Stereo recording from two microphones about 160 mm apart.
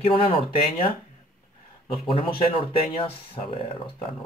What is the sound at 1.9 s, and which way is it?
Speech, 35° left (ahead or behind).